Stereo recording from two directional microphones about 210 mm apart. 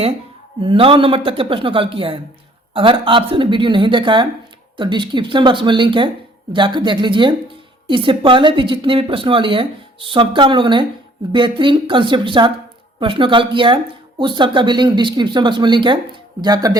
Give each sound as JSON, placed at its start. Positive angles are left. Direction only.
{"t": 0.6, "sound": "speech", "side_deg": -25}